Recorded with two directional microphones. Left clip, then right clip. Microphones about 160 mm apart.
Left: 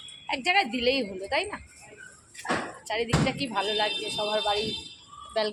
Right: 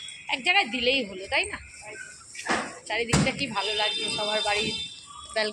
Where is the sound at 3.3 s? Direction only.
20° left (ahead or behind).